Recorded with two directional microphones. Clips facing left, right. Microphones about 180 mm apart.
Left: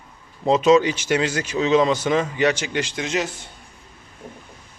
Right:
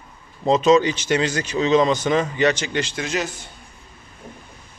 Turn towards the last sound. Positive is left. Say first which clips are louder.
# left 1 dB
turn(degrees=25)  # may be behind; listen again after turning